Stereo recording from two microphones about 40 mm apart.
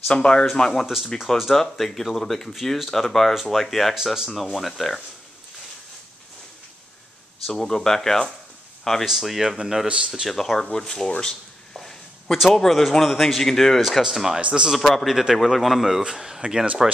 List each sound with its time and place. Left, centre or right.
0.1 s speech: left
0.6 s speech: centre
3.9 s speech: centre
4.3 s speech: centre
7.4 s speech: centre
9.0 s speech: centre
9.8 s speech: right
10.3 s speech: centre
10.6 s speech: centre
11.7 s a sound: centre
12.4 s speech: centre
13.7 s speech: centre
14.9 s speech: centre
16.0 s speech: centre